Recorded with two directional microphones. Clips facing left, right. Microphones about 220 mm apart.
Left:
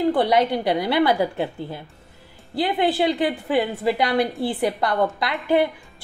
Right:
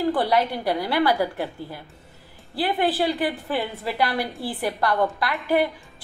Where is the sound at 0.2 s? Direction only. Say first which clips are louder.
Left 3 dB; 20° left (ahead or behind).